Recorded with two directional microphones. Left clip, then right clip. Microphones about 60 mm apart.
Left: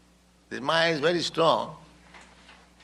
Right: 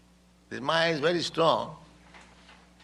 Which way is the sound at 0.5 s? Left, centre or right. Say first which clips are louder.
Left 2 dB; right.